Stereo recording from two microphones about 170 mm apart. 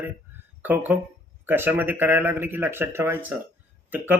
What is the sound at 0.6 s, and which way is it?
Speech, 10° right (ahead or behind).